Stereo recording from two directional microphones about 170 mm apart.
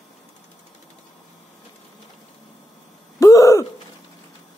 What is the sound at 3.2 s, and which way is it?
Throat clearing, 20° left (ahead or behind).